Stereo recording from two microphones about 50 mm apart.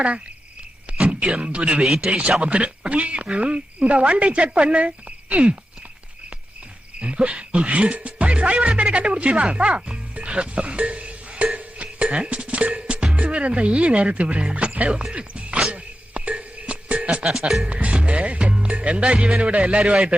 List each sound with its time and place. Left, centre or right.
0.9 s a man's voice: centre
7.0 s speech: right
11.1 s a sound: right
12.0 s speech: centre
15.1 s music: right
17.6 s speech: right